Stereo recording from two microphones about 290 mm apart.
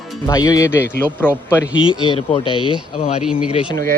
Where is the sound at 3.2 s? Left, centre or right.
Centre.